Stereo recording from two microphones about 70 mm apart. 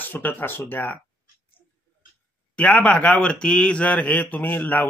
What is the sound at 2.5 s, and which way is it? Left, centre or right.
Speech, left.